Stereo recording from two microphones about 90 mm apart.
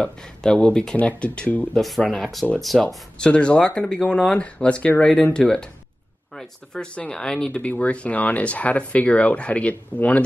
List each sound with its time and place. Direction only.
0.0 s speech: 10° left (ahead or behind)
1.8 s speech: centre (ahead or behind)